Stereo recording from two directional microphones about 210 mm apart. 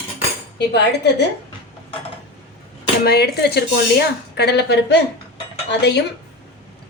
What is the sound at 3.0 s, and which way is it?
Speech, 50° left (ahead or behind).